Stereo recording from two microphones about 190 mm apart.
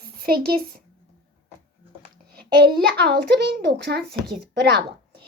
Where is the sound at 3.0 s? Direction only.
60° right (ahead or behind).